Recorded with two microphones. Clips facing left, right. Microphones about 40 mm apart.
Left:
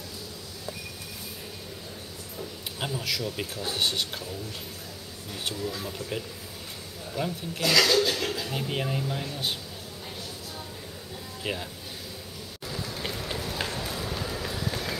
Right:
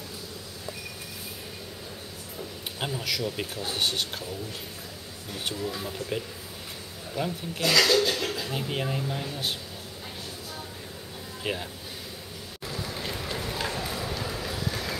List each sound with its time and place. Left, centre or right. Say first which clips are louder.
2.3 s a sound: even; centre
3.3 s speech: even; centre
5.5 s speech: right 1 dB; centre
7.2 s speech: even; centre
11.4 s speech: right 1 dB; centre
12.6 s a sound: even; centre
14.2 s vehicle: even; centre